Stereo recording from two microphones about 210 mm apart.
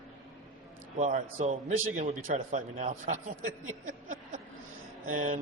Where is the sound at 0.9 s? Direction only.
35° right (ahead or behind).